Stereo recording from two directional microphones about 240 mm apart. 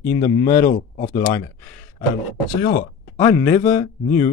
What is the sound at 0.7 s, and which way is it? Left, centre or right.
Speech, left.